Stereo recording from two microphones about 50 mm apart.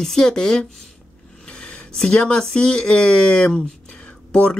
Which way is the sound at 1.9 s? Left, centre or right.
Centre.